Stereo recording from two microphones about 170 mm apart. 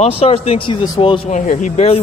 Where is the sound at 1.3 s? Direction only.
45° left (ahead or behind).